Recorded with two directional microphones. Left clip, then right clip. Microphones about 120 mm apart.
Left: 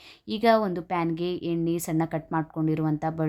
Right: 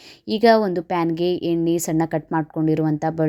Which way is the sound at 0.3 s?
30° right (ahead or behind).